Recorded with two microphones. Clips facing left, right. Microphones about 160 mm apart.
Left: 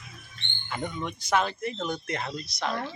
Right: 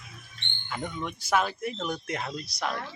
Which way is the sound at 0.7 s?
Centre (ahead or behind).